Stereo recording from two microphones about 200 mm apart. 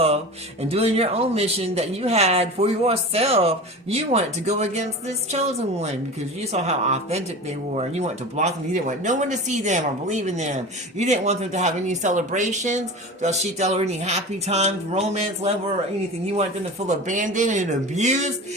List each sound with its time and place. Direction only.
0.6 s speech: 30° right (ahead or behind)